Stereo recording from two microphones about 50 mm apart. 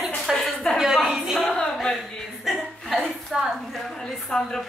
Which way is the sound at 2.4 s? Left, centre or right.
Centre.